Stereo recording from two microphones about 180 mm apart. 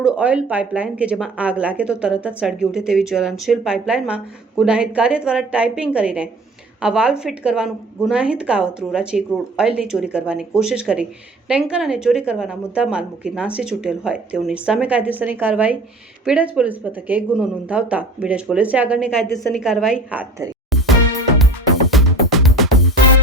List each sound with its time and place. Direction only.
0.0 s a woman's voice: 5° right (ahead or behind)
19.3 s a woman's voice: 20° left (ahead or behind)
19.6 s a woman's voice: centre (ahead or behind)
20.7 s music: centre (ahead or behind)